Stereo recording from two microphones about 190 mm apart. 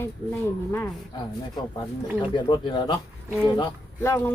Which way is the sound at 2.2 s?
25° left (ahead or behind).